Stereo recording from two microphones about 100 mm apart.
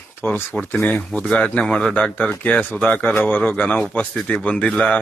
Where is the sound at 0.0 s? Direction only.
20° left (ahead or behind).